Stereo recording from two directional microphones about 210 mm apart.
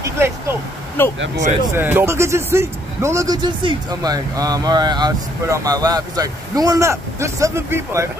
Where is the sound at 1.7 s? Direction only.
10° right (ahead or behind).